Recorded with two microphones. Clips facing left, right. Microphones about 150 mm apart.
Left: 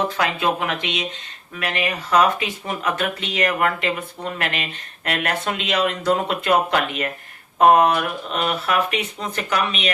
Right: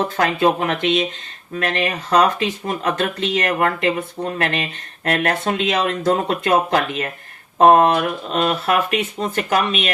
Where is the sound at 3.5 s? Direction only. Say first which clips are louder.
Right 3 dB; 30° right (ahead or behind).